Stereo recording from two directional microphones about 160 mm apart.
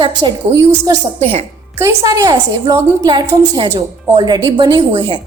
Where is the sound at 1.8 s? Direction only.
20° right (ahead or behind).